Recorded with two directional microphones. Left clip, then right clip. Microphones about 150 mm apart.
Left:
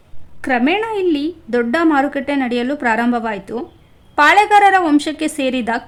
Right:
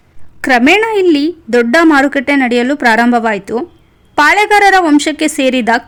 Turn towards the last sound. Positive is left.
turn(degrees=-30)  # may be behind; listen again after turning